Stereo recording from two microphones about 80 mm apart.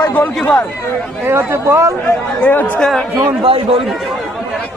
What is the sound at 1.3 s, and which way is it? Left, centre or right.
Speech, right.